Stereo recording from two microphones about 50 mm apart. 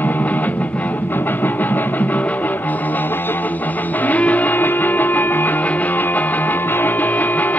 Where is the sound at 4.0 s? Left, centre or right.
Left.